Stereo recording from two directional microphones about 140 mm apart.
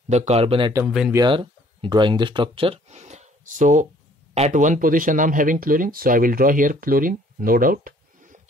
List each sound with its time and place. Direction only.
0.1 s speech: 50° right (ahead or behind)
0.8 s speech: 5° right (ahead or behind)
1.1 s speech: 35° right (ahead or behind); by 8.4 s 80° right